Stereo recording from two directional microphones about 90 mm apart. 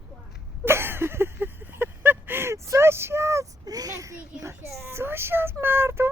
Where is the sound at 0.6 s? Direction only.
25° right (ahead or behind).